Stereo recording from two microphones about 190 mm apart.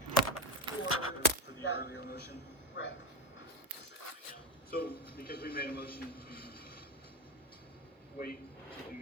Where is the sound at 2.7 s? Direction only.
70° left (ahead or behind).